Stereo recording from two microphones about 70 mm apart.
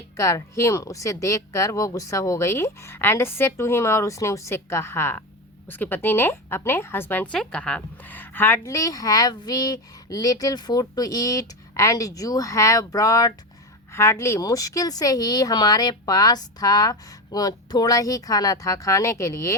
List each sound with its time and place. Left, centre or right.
0.2 s a woman's voice: left
7.3 s a woman's voice: centre
7.8 s speech: left
8.6 s speech: left
13.9 s speech: left